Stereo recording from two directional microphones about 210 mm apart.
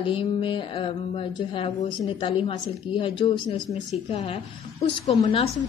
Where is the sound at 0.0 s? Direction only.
25° left (ahead or behind).